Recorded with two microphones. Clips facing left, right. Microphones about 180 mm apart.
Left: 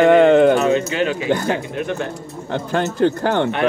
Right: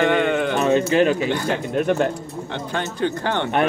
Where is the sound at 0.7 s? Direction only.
40° right (ahead or behind).